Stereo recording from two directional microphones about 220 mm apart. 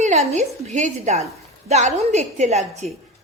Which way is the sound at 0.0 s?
30° right (ahead or behind).